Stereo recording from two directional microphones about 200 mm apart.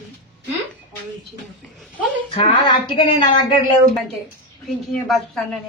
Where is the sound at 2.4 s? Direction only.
25° left (ahead or behind).